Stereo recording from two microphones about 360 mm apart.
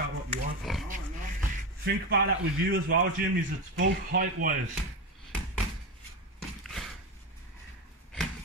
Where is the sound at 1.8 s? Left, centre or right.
Right.